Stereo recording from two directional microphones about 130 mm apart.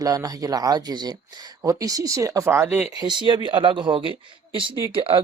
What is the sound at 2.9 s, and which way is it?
Speech, 35° right (ahead or behind).